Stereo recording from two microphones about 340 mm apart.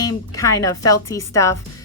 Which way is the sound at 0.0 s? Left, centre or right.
Centre.